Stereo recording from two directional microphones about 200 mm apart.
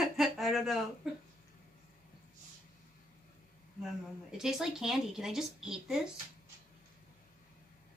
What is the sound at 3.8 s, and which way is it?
Speech, 5° right (ahead or behind).